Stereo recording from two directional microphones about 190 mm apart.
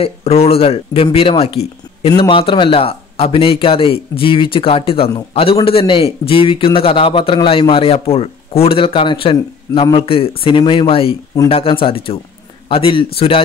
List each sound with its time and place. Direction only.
0.0 s speech: 30° left (ahead or behind)